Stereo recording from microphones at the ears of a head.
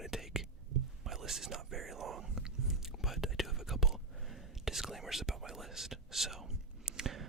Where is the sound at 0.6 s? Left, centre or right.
Right.